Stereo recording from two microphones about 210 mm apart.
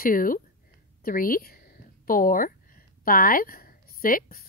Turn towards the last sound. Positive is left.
turn(degrees=45)  # may be behind; listen again after turning